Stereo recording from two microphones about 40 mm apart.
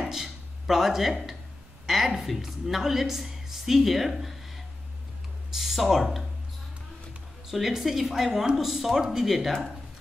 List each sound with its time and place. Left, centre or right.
0.1 s a sound: centre
1.9 s a woman's voice: centre
5.5 s speech: centre
7.5 s a woman's voice: centre